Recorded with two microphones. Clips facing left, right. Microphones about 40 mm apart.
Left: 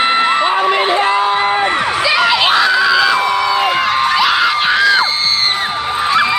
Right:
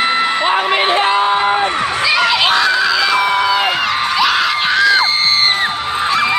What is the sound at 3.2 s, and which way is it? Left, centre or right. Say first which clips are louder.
Crowd: even; right.